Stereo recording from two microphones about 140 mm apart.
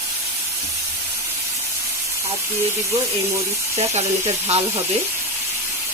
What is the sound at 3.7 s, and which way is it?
Speech, 50° right (ahead or behind).